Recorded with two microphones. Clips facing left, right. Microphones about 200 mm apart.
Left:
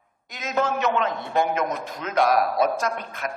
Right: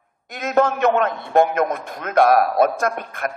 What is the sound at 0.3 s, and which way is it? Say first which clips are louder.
A man's voice: right 6 dB; 55° right (ahead or behind).